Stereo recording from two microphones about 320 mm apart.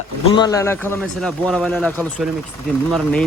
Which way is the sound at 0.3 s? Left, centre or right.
Centre.